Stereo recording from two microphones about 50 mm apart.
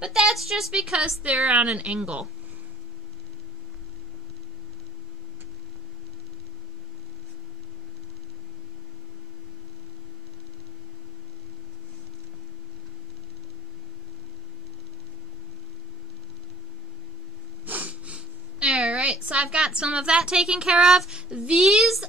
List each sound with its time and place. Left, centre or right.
0.2 s a woman's voice: centre; by 2.2 s right
17.6 s a sound: right
20.8 s speech: centre